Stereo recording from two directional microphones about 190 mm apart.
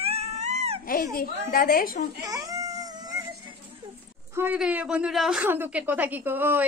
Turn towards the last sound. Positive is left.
turn(degrees=-10)  # may be behind; listen again after turning